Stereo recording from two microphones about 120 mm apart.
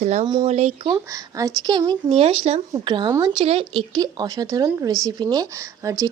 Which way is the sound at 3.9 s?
35° right (ahead or behind).